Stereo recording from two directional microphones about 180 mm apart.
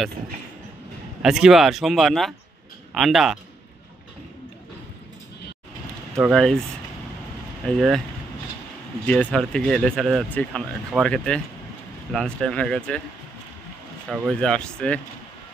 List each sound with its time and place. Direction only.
1.2 s speech: 5° right (ahead or behind)
6.3 s speech: 5° left (ahead or behind)
9.0 s speech: 5° left (ahead or behind)
14.0 s speech: 5° right (ahead or behind)
14.4 s speech: 5° left (ahead or behind)